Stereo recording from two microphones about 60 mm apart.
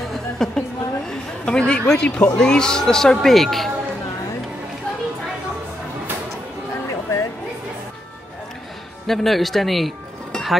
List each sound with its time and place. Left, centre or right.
0.0 s a sound: centre
2.3 s speech: centre
6.7 s music: left
9.0 s speech: centre